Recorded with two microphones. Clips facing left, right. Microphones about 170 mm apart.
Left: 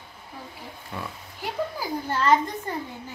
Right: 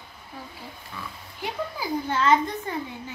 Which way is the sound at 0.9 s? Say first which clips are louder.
Left 5 dB; 60° left (ahead or behind).